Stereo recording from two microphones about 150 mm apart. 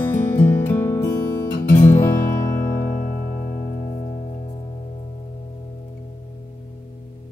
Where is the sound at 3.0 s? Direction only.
70° left (ahead or behind); by 4.5 s 50° left (ahead or behind).